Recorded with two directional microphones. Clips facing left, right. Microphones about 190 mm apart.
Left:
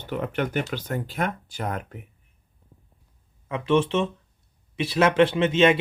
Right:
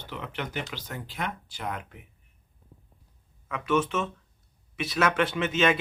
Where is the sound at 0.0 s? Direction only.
50° left (ahead or behind).